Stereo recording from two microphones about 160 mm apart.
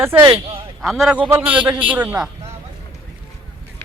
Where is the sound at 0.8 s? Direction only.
Centre (ahead or behind).